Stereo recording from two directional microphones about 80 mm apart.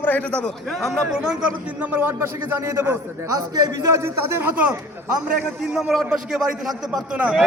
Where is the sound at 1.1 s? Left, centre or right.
Centre; by 4.4 s right.